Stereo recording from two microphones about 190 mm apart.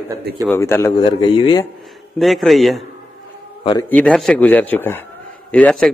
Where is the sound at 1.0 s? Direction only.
25° left (ahead or behind).